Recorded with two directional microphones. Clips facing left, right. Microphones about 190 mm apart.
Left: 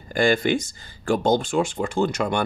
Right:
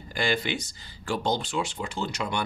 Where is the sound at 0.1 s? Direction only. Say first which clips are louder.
Left 8 dB; 50° left (ahead or behind).